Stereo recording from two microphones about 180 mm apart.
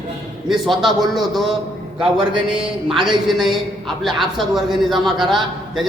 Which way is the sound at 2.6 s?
5° right (ahead or behind).